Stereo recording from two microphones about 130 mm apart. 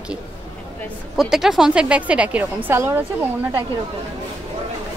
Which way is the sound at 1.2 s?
5° right (ahead or behind).